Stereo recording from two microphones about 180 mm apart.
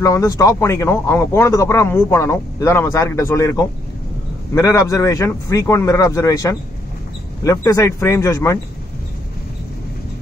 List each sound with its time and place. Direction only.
0.0 s speech: 20° left (ahead or behind)